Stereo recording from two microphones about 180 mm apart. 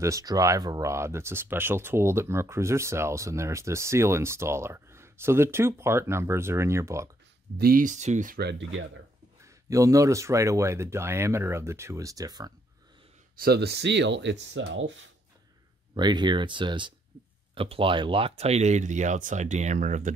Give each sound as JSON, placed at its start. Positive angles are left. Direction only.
{"t": 0.0, "sound": "speech", "side_deg": -20}
{"t": 7.5, "sound": "speech", "side_deg": -55}
{"t": 8.4, "sound": "speech", "side_deg": -80}
{"t": 9.4, "sound": "speech", "side_deg": -15}
{"t": 13.4, "sound": "speech", "side_deg": -65}
{"t": 15.9, "sound": "speech", "side_deg": -25}
{"t": 17.1, "sound": "a sound", "side_deg": -25}
{"t": 17.6, "sound": "speech", "side_deg": -30}